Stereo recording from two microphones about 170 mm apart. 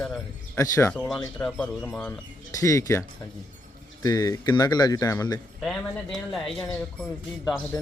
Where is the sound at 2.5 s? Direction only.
20° left (ahead or behind).